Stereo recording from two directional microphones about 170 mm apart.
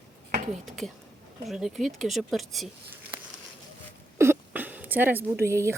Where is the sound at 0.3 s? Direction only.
50° right (ahead or behind).